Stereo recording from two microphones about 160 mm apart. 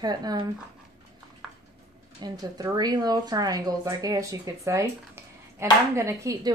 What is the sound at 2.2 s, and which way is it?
Speech, 25° right (ahead or behind).